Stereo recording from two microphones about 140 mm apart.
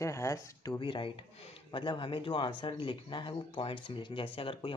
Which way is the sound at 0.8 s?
35° left (ahead or behind).